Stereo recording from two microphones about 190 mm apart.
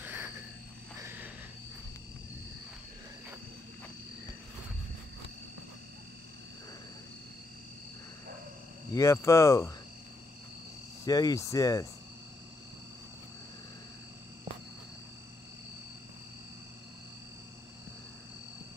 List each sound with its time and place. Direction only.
0.0 s a sound: 10° right (ahead or behind)
8.9 s speech: 15° left (ahead or behind)
11.1 s speech: 20° left (ahead or behind)